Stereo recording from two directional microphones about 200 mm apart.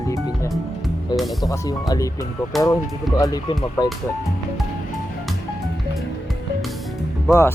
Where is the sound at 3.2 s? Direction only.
20° left (ahead or behind).